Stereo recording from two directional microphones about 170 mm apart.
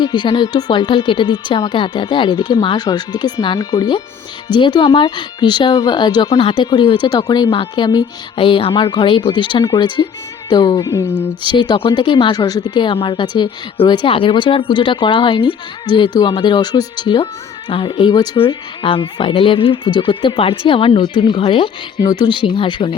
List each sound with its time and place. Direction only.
0.0 s a woman's voice: 25° left (ahead or behind)